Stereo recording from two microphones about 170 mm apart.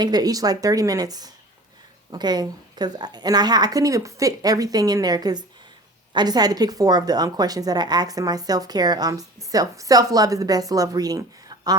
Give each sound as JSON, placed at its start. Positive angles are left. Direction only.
{"t": 0.0, "sound": "a woman's voice", "side_deg": -25}